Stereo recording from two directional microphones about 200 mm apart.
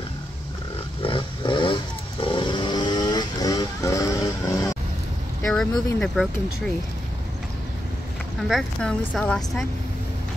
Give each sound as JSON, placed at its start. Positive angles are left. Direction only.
{"t": 1.0, "sound": "vehicle", "side_deg": 25}
{"t": 5.7, "sound": "speech", "side_deg": 20}
{"t": 5.9, "sound": "a woman's voice", "side_deg": 5}
{"t": 8.5, "sound": "a woman's voice", "side_deg": 5}